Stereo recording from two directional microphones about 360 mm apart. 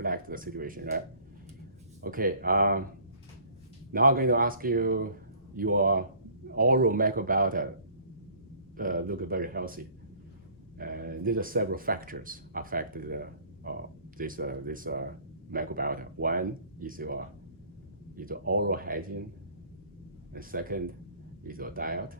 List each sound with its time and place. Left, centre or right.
0.0 s speech: right
2.0 s speech: right
3.9 s speech: right
8.7 s speech: right
20.3 s speech: right